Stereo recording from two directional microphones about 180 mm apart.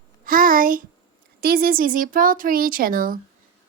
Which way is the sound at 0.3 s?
50° right (ahead or behind).